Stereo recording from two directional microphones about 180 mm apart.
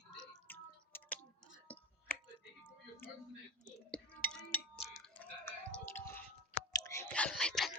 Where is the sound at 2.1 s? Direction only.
10° left (ahead or behind).